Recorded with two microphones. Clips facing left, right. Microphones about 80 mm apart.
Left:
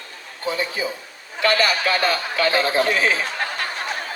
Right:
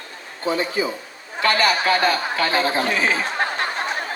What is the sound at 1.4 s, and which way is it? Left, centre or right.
Chatter, right.